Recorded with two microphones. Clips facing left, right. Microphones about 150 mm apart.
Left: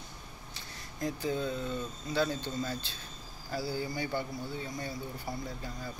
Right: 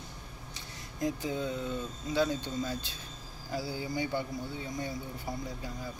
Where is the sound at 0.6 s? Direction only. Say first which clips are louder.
Right 3 dB; 15° right (ahead or behind).